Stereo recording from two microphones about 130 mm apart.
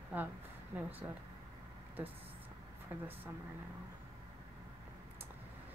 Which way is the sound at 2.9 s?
15° right (ahead or behind).